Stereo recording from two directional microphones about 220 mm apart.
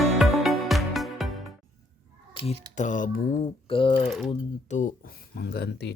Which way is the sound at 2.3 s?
25° left (ahead or behind).